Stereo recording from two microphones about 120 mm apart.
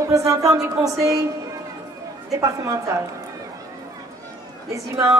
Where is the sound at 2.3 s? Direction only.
30° right (ahead or behind).